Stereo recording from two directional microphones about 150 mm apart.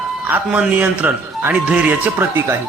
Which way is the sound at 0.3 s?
10° right (ahead or behind).